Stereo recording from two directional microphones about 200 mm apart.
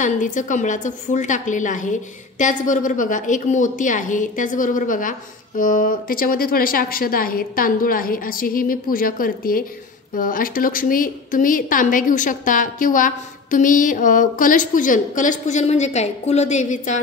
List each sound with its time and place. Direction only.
0.0 s a woman's voice: 40° left (ahead or behind)